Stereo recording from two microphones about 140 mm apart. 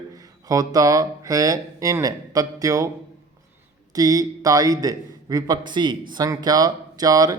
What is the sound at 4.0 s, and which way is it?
Speech, 25° right (ahead or behind).